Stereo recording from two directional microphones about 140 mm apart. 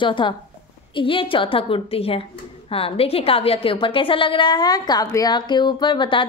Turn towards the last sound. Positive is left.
turn(degrees=35)  # may be behind; listen again after turning